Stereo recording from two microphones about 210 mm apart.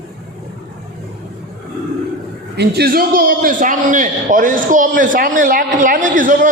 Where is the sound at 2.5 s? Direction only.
50° right (ahead or behind).